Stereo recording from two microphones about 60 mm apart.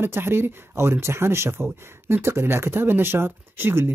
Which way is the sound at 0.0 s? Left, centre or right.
Right.